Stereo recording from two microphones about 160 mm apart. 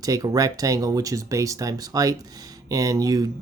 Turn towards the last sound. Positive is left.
turn(degrees=-20)  # may be behind; listen again after turning